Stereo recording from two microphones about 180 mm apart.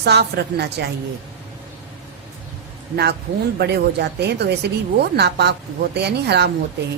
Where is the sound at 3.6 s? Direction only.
65° right (ahead or behind).